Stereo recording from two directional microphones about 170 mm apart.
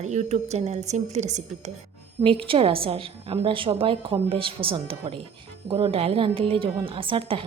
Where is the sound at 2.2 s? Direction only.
30° right (ahead or behind).